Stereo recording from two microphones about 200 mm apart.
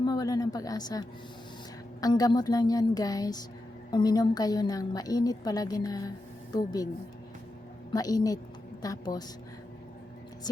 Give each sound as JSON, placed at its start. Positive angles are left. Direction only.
{"t": 0.0, "sound": "a woman's voice", "side_deg": 20}
{"t": 7.9, "sound": "a woman's voice", "side_deg": 20}